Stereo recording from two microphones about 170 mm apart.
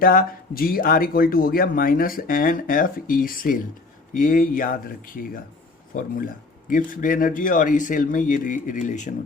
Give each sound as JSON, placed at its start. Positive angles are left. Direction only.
{"t": 0.0, "sound": "speech", "side_deg": 55}